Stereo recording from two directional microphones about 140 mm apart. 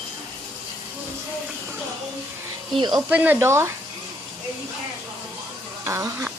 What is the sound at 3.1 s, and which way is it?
Speech, 10° right (ahead or behind).